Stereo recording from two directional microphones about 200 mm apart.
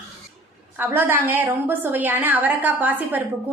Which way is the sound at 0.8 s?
10° right (ahead or behind).